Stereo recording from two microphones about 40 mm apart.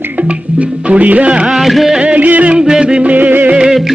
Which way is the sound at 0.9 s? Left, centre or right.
Right.